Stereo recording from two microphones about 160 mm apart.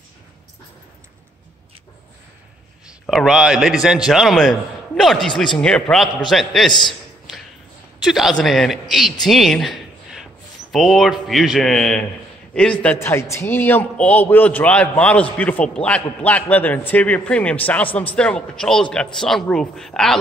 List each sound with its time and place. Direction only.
3.1 s a man's voice: centre (ahead or behind)
8.0 s a man's voice: centre (ahead or behind)
9.3 s a sound: centre (ahead or behind)
10.7 s a man's voice: centre (ahead or behind)